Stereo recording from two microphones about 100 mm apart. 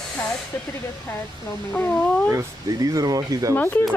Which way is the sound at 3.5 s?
20° left (ahead or behind).